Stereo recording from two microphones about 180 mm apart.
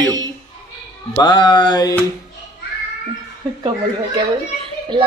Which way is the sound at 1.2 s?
25° left (ahead or behind).